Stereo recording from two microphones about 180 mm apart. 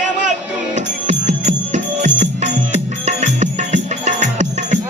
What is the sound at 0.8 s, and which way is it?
Music, 40° right (ahead or behind).